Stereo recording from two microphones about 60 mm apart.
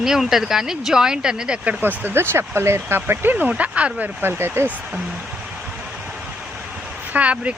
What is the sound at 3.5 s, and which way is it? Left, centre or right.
Speech, right.